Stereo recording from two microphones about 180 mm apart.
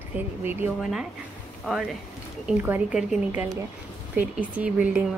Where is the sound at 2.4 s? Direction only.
10° right (ahead or behind).